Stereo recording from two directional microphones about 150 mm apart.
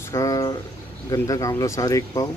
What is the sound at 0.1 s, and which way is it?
Speech, 20° left (ahead or behind).